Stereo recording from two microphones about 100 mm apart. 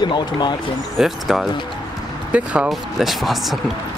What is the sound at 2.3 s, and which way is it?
Speech, 10° right (ahead or behind).